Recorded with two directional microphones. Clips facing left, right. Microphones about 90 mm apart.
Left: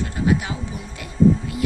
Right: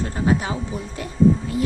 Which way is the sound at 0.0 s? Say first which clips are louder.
Even; 35° right (ahead or behind).